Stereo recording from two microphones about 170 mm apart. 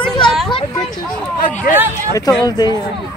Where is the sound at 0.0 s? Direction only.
Centre (ahead or behind).